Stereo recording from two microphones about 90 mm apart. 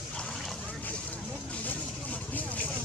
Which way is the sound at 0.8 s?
15° left (ahead or behind).